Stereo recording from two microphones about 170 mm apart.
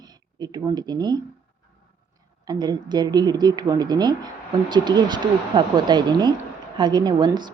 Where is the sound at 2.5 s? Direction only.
25° right (ahead or behind).